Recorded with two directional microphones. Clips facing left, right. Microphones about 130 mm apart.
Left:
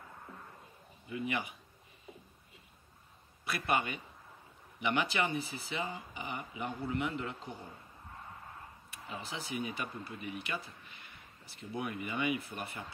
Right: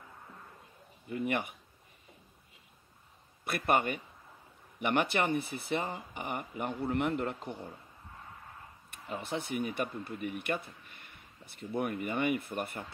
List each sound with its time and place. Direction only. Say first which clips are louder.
1.0 s speech: right 4 dB; 50° right (ahead or behind)
3.4 s speech: right 4 dB; 50° right (ahead or behind)
9.2 s speech: right 5 dB; 55° right (ahead or behind)